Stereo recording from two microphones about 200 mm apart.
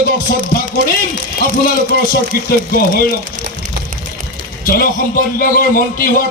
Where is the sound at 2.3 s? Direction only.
50° left (ahead or behind).